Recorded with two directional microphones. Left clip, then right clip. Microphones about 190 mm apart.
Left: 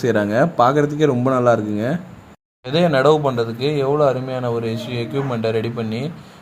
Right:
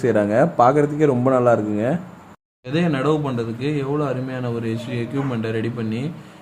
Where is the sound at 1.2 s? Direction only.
20° left (ahead or behind).